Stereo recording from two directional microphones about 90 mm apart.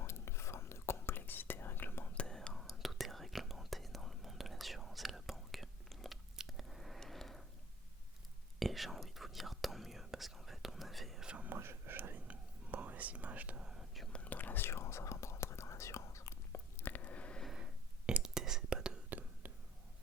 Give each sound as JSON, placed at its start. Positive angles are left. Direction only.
{"t": 0.0, "sound": "whispering", "side_deg": 30}
{"t": 2.1, "sound": "whispering", "side_deg": 10}
{"t": 8.5, "sound": "whispering", "side_deg": 0}
{"t": 11.4, "sound": "whispering", "side_deg": -25}
{"t": 14.1, "sound": "whispering", "side_deg": 15}
{"t": 17.4, "sound": "whispering", "side_deg": -5}